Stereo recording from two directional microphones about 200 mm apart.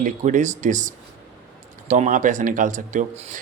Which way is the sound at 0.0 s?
40° right (ahead or behind).